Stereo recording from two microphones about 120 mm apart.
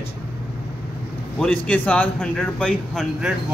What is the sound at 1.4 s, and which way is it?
A man's voice, 10° left (ahead or behind).